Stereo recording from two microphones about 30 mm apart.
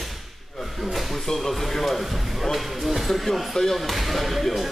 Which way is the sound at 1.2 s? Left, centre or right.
Centre.